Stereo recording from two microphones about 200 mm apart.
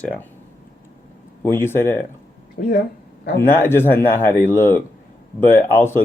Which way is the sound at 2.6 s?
55° left (ahead or behind).